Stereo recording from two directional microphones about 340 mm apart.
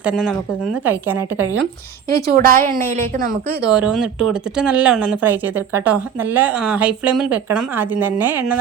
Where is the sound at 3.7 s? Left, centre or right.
Centre.